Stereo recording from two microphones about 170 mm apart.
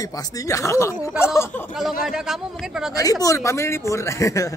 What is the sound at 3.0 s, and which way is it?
Speech, 20° left (ahead or behind).